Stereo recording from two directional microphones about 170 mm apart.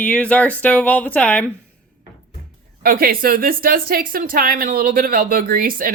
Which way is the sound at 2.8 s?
60° right (ahead or behind).